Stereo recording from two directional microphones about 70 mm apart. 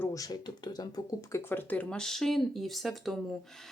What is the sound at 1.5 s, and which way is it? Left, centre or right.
Speech, left.